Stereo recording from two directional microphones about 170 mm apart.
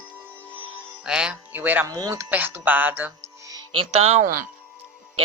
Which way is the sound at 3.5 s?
35° right (ahead or behind).